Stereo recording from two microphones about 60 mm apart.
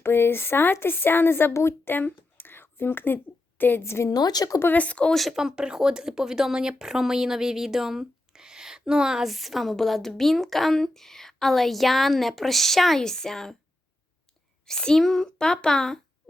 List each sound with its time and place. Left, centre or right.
0.0 s a woman's voice: left
1.8 s a sound: left
3.6 s a woman's voice: left
4.1 s speech: left
4.7 s speech: left
5.1 s speech: centre
14.7 s a child's voice: centre